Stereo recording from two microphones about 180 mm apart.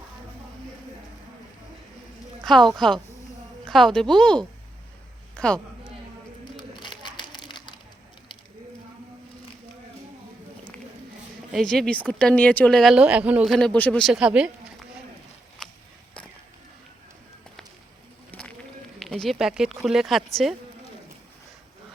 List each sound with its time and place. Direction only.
2.4 s a sound: centre (ahead or behind)
3.7 s a woman's voice: centre (ahead or behind)
6.4 s bird: 25° left (ahead or behind)
11.5 s a woman's voice: 5° left (ahead or behind)
18.3 s bird: 10° left (ahead or behind)
18.9 s a woman's voice: centre (ahead or behind)